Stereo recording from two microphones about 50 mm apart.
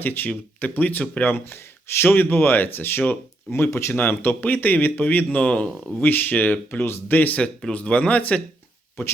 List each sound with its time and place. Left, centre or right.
0.0 s speech: left
1.2 s speech: left
3.5 s speech: left
3.9 s speech: left
6.0 s speech: left
6.7 s speech: left
7.7 s speech: left